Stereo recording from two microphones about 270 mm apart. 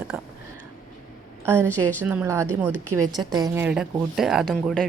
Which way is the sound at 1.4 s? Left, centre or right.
Centre.